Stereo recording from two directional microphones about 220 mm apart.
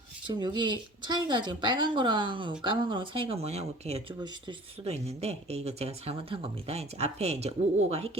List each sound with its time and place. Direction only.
0.3 s speech: 20° right (ahead or behind)